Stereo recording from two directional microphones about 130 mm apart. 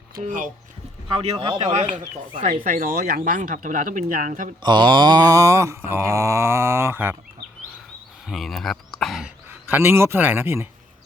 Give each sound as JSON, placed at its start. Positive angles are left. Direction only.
{"t": 0.2, "sound": "speech", "side_deg": -90}
{"t": 1.2, "sound": "speech", "side_deg": -45}
{"t": 1.7, "sound": "speech", "side_deg": -65}
{"t": 2.7, "sound": "speech", "side_deg": -90}
{"t": 4.6, "sound": "mantra", "side_deg": -35}
{"t": 8.3, "sound": "a sound", "side_deg": 0}
{"t": 9.5, "sound": "a man's voice", "side_deg": -15}